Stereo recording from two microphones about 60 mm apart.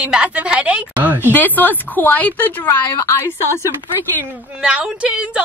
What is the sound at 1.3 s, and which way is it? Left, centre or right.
A woman's voice, left.